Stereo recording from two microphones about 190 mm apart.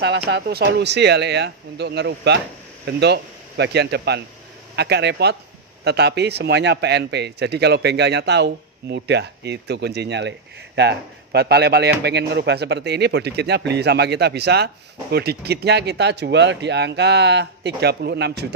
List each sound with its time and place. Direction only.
0.3 s speech: 60° right (ahead or behind)